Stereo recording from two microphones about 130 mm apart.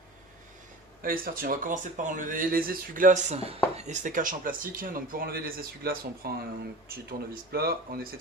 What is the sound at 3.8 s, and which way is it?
Speech, 70° right (ahead or behind).